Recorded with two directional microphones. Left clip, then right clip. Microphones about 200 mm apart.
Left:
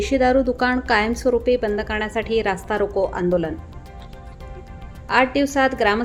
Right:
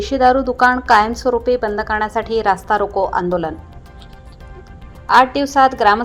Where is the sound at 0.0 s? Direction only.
5° right (ahead or behind).